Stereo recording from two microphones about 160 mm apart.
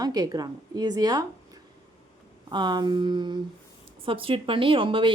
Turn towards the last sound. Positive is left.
turn(degrees=-30)  # may be behind; listen again after turning